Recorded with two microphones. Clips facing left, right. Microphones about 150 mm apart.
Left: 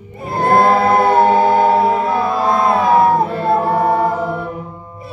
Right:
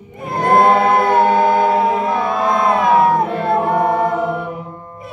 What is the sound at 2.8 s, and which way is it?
Music, 30° left (ahead or behind).